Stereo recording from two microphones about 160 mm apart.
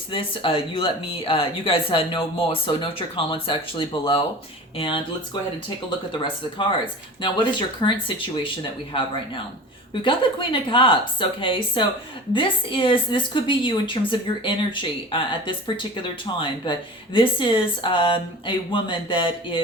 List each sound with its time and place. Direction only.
0.1 s a woman's voice: 35° left (ahead or behind)